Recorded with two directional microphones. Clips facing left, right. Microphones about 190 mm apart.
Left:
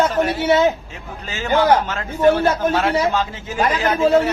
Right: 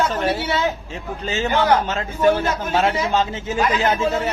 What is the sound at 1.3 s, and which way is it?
Speech, 20° right (ahead or behind).